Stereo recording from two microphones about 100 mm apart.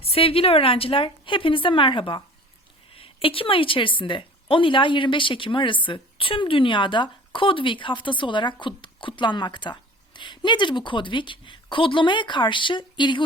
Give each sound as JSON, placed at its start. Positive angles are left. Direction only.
{"t": 0.0, "sound": "a woman's voice", "side_deg": 75}